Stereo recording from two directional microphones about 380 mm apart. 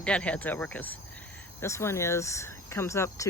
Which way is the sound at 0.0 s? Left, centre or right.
Centre.